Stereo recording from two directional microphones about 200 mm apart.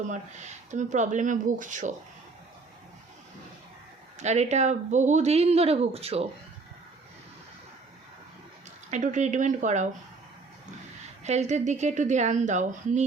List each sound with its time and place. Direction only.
0.1 s speech: 35° right (ahead or behind)
4.2 s speech: 35° right (ahead or behind)
8.9 s speech: 35° right (ahead or behind)
11.2 s speech: 35° right (ahead or behind)